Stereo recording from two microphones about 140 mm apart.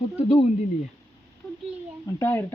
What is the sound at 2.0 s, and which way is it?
Speech, 15° left (ahead or behind).